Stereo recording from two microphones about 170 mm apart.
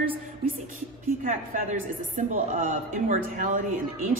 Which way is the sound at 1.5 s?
50° right (ahead or behind).